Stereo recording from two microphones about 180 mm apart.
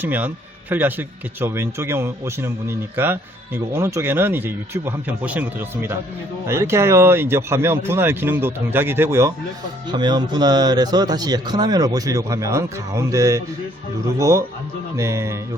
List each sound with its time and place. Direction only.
0.0 s speech: 10° right (ahead or behind)